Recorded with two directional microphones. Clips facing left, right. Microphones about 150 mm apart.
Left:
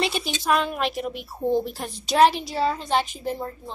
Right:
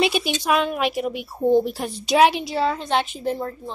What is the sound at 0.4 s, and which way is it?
A woman's voice, centre (ahead or behind).